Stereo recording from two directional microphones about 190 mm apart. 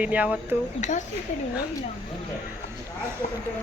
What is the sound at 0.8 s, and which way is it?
Speech, 40° left (ahead or behind).